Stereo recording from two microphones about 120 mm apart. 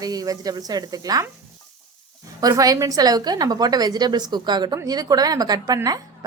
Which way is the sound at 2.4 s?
30° right (ahead or behind).